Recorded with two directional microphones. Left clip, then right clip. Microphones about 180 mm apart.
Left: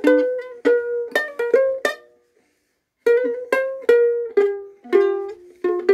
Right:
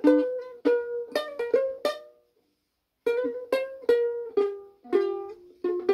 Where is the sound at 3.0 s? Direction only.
35° left (ahead or behind).